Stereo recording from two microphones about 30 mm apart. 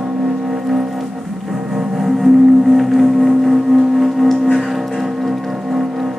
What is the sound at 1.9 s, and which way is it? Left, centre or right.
Music, centre.